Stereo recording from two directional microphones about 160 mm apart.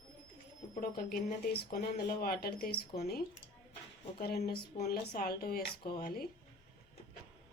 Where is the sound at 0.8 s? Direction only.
75° left (ahead or behind).